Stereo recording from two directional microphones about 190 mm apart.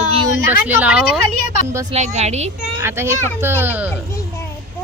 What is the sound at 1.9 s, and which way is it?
Speech, 35° right (ahead or behind).